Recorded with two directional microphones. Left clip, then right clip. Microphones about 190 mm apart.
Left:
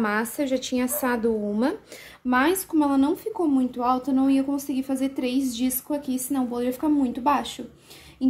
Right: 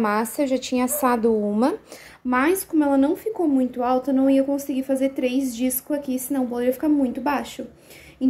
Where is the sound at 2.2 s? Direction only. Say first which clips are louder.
Right 1 dB; 15° left (ahead or behind).